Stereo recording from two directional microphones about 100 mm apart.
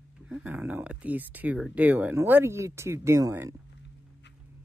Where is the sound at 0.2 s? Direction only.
10° right (ahead or behind); by 3.5 s 30° right (ahead or behind).